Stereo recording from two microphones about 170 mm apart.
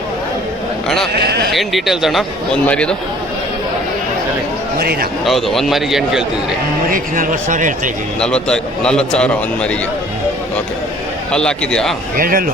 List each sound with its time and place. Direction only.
1.1 s a sound: 70° right (ahead or behind)
1.5 s a man's voice: centre (ahead or behind)
4.8 s speech: 65° right (ahead or behind)
5.2 s a man's voice: centre (ahead or behind)
6.9 s a man's voice: 50° right (ahead or behind)
8.2 s a man's voice: 5° left (ahead or behind)
11.3 s a man's voice: 5° left (ahead or behind)
12.1 s speech: 55° right (ahead or behind)